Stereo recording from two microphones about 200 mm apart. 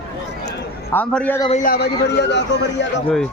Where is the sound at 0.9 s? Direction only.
5° left (ahead or behind).